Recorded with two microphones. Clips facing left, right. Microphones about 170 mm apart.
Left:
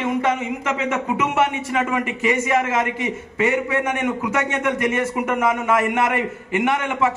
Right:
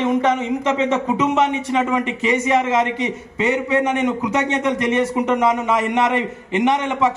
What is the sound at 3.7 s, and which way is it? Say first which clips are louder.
A man's voice: right 4 dB; 35° right (ahead or behind).